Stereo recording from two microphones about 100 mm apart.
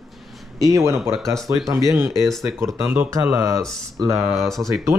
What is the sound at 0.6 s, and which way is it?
Speech, 30° right (ahead or behind).